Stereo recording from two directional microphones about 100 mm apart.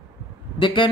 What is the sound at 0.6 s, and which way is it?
Speech, 55° left (ahead or behind).